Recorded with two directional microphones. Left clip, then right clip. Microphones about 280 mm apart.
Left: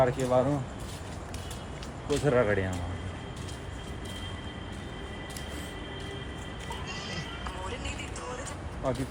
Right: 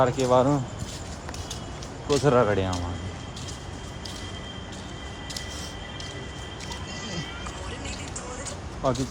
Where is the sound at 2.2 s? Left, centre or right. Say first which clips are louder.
Right 4 dB; centre.